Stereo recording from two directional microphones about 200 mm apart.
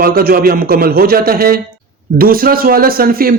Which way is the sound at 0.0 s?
50° right (ahead or behind).